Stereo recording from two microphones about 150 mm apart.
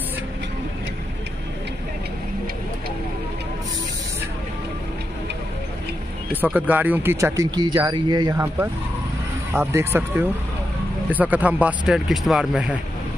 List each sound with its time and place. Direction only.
6.7 s speech: 10° right (ahead or behind); by 8.4 s 30° right (ahead or behind)
9.5 s speech: 15° right (ahead or behind)